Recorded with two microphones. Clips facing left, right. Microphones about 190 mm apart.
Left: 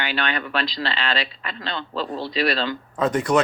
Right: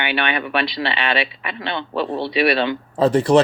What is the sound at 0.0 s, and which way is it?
Speech, 65° right (ahead or behind).